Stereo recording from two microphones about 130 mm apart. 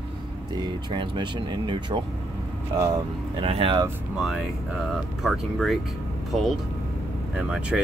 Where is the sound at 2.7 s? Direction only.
25° right (ahead or behind).